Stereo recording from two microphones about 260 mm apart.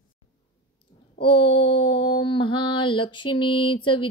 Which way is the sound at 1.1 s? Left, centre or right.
Centre.